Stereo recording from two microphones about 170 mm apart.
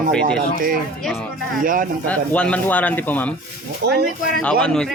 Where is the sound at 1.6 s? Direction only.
55° right (ahead or behind).